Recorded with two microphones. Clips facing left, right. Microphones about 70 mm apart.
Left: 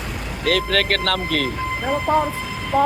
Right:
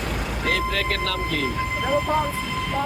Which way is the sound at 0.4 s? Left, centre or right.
Left.